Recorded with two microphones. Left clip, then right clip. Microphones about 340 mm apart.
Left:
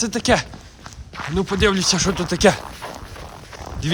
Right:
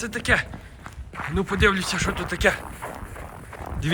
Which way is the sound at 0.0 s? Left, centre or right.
Centre.